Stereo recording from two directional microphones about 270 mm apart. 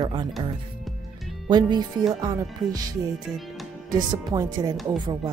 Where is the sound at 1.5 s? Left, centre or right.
Centre.